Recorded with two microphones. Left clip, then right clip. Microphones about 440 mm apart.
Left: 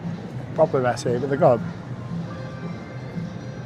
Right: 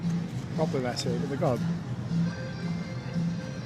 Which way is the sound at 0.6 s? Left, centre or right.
Centre.